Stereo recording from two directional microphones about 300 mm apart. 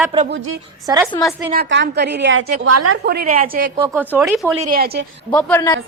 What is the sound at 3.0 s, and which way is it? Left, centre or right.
Speech, right.